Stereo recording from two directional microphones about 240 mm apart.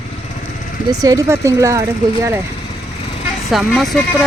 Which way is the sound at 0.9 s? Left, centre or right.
Centre.